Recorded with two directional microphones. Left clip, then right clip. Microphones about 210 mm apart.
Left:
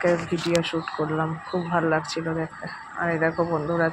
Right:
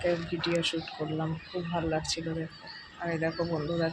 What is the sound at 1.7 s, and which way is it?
Speech, 15° left (ahead or behind).